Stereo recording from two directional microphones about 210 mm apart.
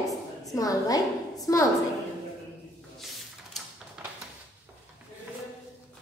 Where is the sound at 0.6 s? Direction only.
15° left (ahead or behind).